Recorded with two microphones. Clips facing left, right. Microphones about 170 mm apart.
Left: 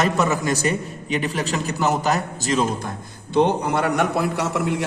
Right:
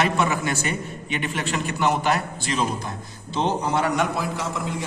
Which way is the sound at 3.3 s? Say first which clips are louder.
Left 4 dB; 55° left (ahead or behind).